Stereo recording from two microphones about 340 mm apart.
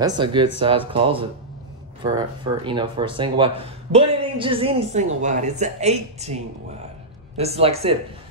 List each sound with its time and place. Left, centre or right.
0.0 s speech: centre